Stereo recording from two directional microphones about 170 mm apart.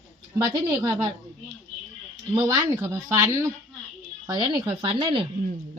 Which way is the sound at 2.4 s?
15° right (ahead or behind).